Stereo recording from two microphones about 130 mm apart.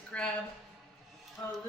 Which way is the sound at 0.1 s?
10° left (ahead or behind).